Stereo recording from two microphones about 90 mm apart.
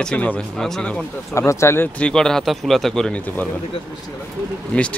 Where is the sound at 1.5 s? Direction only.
30° left (ahead or behind).